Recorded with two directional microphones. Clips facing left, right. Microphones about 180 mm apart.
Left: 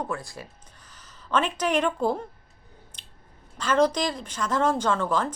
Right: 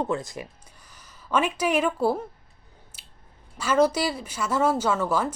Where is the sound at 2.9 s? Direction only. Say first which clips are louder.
Left 2 dB; 5° right (ahead or behind).